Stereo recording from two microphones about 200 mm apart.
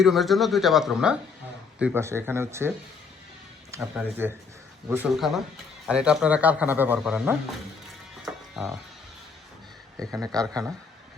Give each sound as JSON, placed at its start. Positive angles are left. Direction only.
{"t": 0.0, "sound": "speech", "side_deg": 0}
{"t": 3.8, "sound": "speech", "side_deg": -5}
{"t": 8.2, "sound": "music", "side_deg": 0}
{"t": 10.0, "sound": "speech", "side_deg": -15}